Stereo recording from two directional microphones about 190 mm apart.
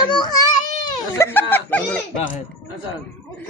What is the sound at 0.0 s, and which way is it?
Speech, 25° left (ahead or behind).